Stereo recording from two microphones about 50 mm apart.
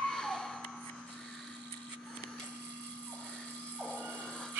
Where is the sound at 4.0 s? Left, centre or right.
Centre.